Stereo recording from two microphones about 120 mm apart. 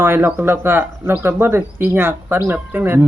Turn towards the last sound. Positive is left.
turn(degrees=-15)  # may be behind; listen again after turning